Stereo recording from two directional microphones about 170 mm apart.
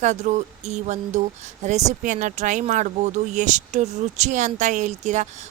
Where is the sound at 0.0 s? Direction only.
45° right (ahead or behind).